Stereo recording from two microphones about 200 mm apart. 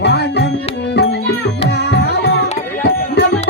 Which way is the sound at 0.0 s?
55° left (ahead or behind).